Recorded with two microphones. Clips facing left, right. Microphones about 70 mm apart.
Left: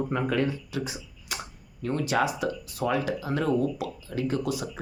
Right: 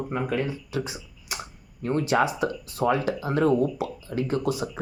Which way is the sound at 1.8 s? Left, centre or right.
Right.